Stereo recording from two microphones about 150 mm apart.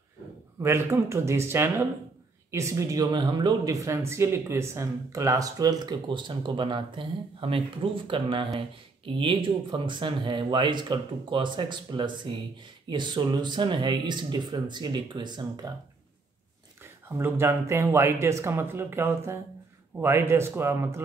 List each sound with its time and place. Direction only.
0.6 s speech: 15° right (ahead or behind)
17.2 s speech: 15° right (ahead or behind)